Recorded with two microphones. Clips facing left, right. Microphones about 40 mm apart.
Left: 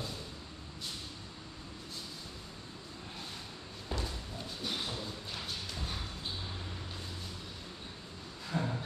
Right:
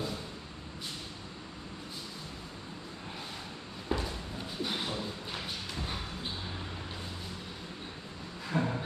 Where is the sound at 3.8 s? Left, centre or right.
Centre.